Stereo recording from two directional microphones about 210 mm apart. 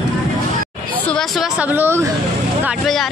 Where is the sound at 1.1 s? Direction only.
5° right (ahead or behind).